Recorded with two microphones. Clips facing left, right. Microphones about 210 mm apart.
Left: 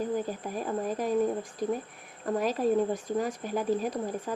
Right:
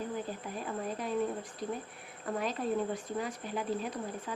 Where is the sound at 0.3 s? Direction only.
45° left (ahead or behind).